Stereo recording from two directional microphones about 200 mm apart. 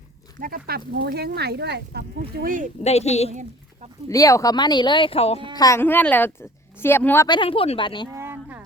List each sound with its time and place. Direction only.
0.3 s speech: 45° right (ahead or behind)
2.4 s speech: 45° right (ahead or behind)
2.8 s a woman's voice: 35° left (ahead or behind)
4.1 s speech: 15° left (ahead or behind)
5.5 s a woman's voice: 15° left (ahead or behind)
7.3 s speech: 25° left (ahead or behind)
8.1 s a sound: 10° right (ahead or behind)